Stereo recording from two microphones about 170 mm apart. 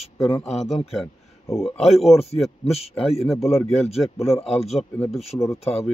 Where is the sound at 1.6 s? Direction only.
Centre (ahead or behind).